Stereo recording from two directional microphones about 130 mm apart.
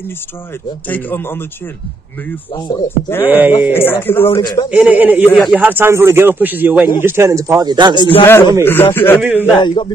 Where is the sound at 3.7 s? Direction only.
15° left (ahead or behind).